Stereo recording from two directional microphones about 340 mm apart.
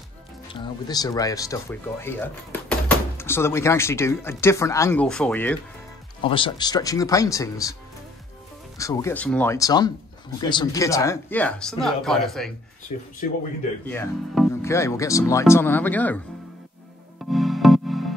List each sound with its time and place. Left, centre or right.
0.5 s speech: centre
6.2 s speech: centre
8.7 s speech: centre
12.9 s speech: left
13.8 s speech: centre
17.3 s music: centre